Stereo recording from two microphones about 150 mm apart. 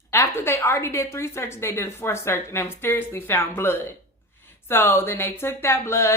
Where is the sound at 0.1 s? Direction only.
15° left (ahead or behind).